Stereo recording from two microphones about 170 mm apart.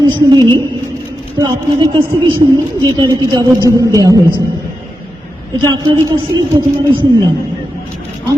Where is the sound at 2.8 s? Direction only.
25° right (ahead or behind).